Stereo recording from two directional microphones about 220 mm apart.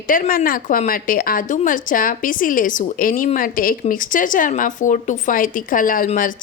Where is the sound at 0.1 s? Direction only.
40° left (ahead or behind).